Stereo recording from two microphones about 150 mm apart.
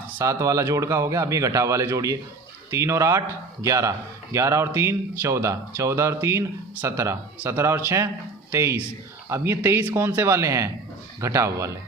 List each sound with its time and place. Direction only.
0.2 s speech: 20° right (ahead or behind)